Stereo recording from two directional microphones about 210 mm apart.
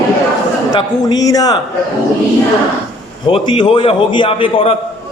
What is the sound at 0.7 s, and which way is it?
Speech, 20° left (ahead or behind).